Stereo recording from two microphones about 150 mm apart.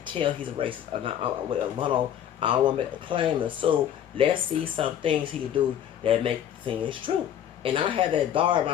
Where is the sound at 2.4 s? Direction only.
35° right (ahead or behind).